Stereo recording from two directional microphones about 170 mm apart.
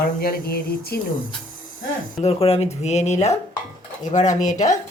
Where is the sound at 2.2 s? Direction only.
35° left (ahead or behind).